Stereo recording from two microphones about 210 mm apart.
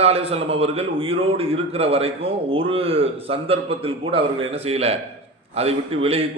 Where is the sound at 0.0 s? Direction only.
30° right (ahead or behind).